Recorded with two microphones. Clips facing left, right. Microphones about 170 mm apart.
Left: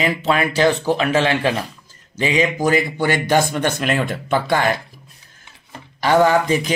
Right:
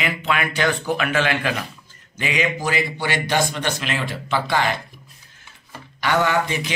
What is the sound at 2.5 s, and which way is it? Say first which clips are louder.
Speech: left 6 dB; 45° left (ahead or behind).